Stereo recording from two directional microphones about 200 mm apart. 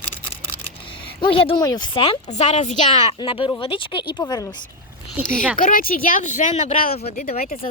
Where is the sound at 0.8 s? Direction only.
25° left (ahead or behind).